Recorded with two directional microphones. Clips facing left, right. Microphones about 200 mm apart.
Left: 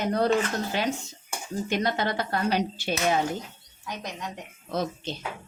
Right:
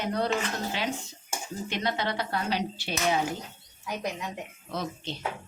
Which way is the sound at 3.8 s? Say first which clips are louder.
Right 3 dB; 10° right (ahead or behind).